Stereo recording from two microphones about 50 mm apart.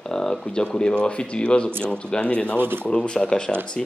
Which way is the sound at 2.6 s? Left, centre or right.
Right.